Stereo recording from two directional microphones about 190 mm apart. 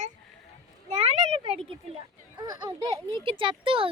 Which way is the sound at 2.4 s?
20° right (ahead or behind).